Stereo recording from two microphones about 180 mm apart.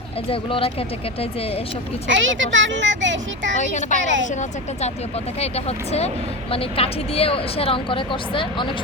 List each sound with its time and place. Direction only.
0.3 s speech: 30° left (ahead or behind)
2.0 s a child's voice: 90° right
3.6 s speech: 40° left (ahead or behind)
4.0 s a child's voice: 90° right
5.4 s speech: 35° left (ahead or behind)